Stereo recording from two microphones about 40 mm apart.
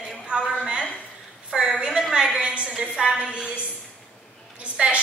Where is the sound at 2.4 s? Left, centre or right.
Right.